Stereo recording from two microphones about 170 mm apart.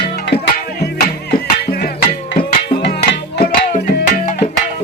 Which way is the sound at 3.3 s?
50° left (ahead or behind).